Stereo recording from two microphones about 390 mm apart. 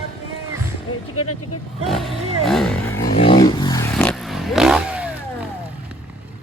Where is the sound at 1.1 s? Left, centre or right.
Left.